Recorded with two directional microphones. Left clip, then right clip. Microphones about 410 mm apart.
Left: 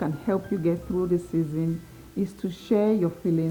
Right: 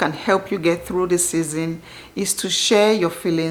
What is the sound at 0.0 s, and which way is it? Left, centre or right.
A woman's voice, centre.